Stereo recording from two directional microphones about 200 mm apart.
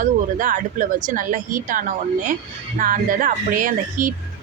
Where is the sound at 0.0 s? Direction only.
40° right (ahead or behind).